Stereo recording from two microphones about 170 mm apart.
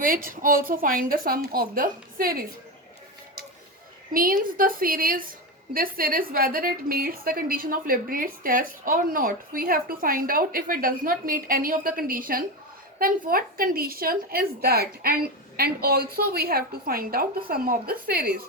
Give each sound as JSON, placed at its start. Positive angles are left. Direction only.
{"t": 0.0, "sound": "a woman's voice", "side_deg": -55}
{"t": 4.1, "sound": "a woman's voice", "side_deg": -55}